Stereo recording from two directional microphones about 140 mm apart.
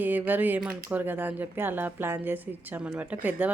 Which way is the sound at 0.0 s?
15° right (ahead or behind).